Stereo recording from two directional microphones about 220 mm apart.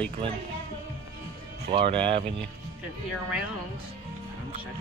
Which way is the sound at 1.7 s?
25° right (ahead or behind).